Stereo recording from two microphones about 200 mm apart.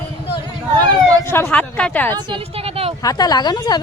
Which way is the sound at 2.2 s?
25° right (ahead or behind).